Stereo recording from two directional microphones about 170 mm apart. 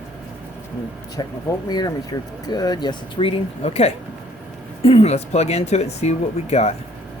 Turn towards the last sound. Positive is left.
turn(degrees=40)  # may be behind; listen again after turning